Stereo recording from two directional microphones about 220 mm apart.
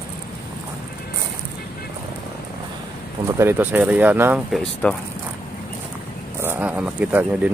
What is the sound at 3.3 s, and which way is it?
Speech, 10° right (ahead or behind).